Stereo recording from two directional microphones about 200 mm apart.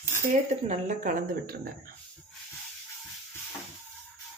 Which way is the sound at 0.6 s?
40° right (ahead or behind).